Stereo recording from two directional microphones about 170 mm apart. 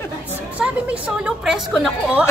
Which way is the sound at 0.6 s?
10° right (ahead or behind).